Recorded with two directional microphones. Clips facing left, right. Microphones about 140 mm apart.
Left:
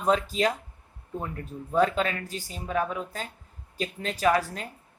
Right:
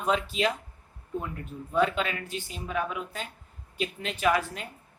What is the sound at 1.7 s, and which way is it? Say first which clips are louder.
Speech: left 2 dB; 40° left (ahead or behind).